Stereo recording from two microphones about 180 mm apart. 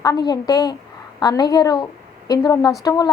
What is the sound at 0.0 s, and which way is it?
A woman's voice, 20° left (ahead or behind).